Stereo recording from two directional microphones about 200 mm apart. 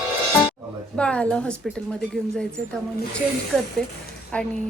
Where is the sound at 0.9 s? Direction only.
5° left (ahead or behind).